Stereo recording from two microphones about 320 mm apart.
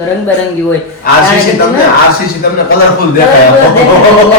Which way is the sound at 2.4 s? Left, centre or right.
Left.